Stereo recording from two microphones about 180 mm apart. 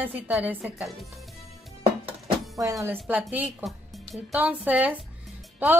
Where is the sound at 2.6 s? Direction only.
15° right (ahead or behind).